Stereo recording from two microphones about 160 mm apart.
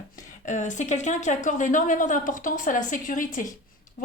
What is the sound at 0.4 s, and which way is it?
A woman's voice, 50° left (ahead or behind).